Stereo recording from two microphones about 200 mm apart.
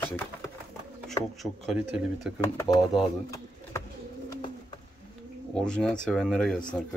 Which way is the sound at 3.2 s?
15° left (ahead or behind).